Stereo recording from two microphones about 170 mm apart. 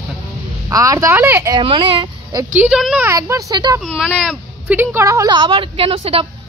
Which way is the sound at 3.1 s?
15° right (ahead or behind).